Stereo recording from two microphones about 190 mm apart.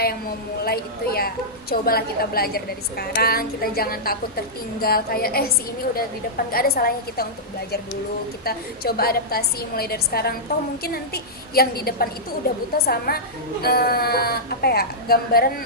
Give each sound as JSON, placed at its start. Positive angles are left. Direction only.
{"t": 0.6, "sound": "a woman's voice", "side_deg": 55}
{"t": 8.4, "sound": "a woman's voice", "side_deg": 55}